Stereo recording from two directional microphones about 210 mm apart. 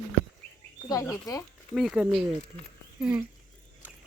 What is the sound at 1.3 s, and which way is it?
Speech, 15° left (ahead or behind).